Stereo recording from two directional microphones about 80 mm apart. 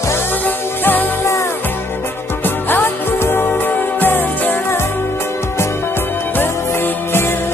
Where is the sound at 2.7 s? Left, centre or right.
Left.